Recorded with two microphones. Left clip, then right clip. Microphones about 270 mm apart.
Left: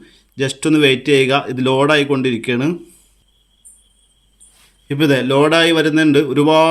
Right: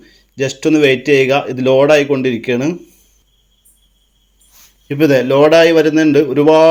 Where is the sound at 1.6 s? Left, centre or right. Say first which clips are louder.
Right 5 dB; left.